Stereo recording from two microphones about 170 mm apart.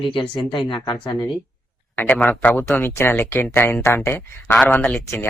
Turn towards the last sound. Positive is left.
turn(degrees=10)  # may be behind; listen again after turning